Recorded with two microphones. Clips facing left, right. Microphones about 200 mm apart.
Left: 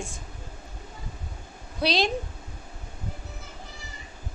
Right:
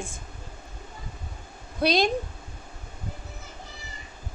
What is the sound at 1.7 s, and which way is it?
Speech, 50° right (ahead or behind).